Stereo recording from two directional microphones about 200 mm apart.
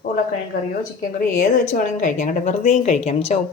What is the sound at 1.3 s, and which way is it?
A woman's voice, 40° left (ahead or behind).